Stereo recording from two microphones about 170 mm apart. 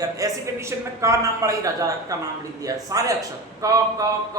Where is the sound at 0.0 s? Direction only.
20° right (ahead or behind).